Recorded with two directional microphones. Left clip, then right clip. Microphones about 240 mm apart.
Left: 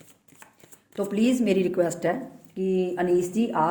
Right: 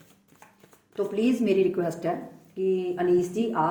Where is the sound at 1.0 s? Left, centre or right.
Left.